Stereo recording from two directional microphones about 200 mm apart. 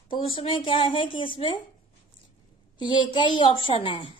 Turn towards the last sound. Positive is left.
turn(degrees=25)  # may be behind; listen again after turning